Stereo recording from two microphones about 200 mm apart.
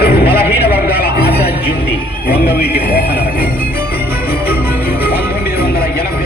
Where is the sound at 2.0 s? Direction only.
50° left (ahead or behind).